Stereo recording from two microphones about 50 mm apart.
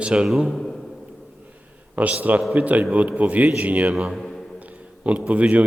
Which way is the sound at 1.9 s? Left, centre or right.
Right.